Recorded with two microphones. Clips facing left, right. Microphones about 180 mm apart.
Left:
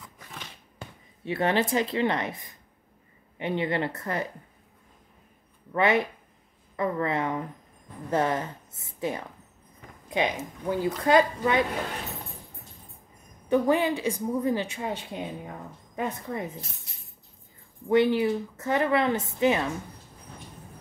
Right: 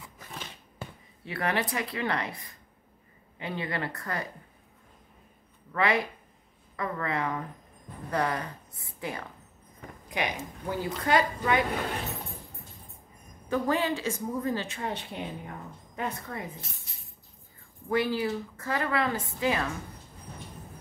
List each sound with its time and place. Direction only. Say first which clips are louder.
1.2 s a woman's voice: left 5 dB; 25° left (ahead or behind)
5.7 s a woman's voice: left 4 dB; 25° left (ahead or behind)
13.5 s a woman's voice: left 5 dB; 15° left (ahead or behind)
17.8 s a woman's voice: left 6 dB; 25° left (ahead or behind)